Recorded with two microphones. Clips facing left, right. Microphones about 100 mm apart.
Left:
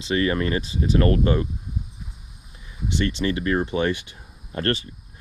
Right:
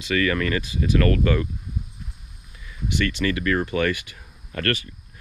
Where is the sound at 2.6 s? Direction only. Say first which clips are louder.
Even; 20° left (ahead or behind).